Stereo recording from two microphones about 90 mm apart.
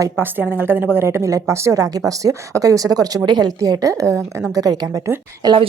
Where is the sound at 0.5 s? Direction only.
20° right (ahead or behind); by 5.0 s 45° right (ahead or behind).